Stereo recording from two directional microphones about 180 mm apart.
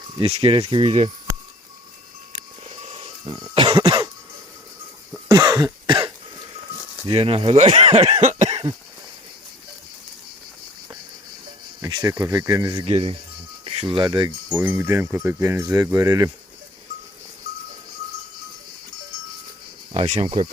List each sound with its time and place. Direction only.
0.2 s speech: 30° right (ahead or behind)
2.6 s cough: 35° right (ahead or behind)
5.3 s cough: 20° right (ahead or behind)
7.1 s speech: 30° right (ahead or behind)
11.8 s a sound: 20° right (ahead or behind)
12.1 s speech: 15° right (ahead or behind)
12.7 s speech: 30° right (ahead or behind)
14.5 s speech: 10° right (ahead or behind)
19.9 s speech: 40° right (ahead or behind)